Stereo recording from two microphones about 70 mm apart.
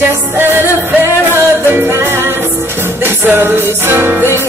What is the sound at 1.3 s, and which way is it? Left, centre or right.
Music, right.